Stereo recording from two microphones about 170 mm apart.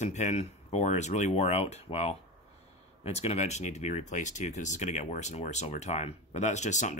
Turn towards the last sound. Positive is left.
turn(degrees=45)  # may be behind; listen again after turning